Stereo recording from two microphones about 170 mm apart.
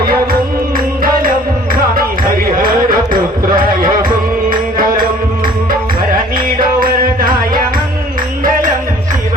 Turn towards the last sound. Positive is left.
turn(degrees=-60)  # may be behind; listen again after turning